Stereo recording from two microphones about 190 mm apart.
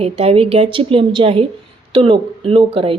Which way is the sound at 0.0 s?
30° right (ahead or behind).